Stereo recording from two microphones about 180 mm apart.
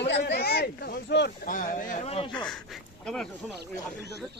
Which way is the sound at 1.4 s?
50° left (ahead or behind).